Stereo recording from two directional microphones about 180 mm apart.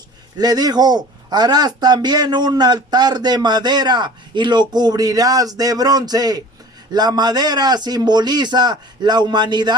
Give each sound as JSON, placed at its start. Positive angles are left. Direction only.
{"t": 0.3, "sound": "a man's voice", "side_deg": -20}